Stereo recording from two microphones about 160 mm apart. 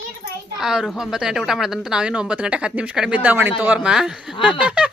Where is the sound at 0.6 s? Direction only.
5° right (ahead or behind).